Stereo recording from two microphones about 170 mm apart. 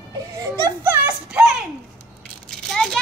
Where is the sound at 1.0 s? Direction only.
5° right (ahead or behind).